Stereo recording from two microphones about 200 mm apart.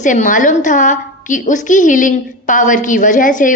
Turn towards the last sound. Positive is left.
turn(degrees=40)  # may be behind; listen again after turning